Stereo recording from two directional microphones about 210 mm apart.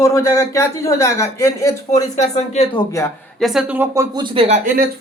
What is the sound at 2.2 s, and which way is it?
Speech, 30° left (ahead or behind).